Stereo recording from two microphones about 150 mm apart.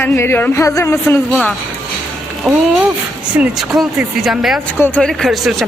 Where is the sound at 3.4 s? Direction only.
Centre (ahead or behind).